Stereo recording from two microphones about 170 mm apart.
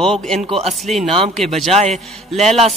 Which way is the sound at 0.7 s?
Centre (ahead or behind).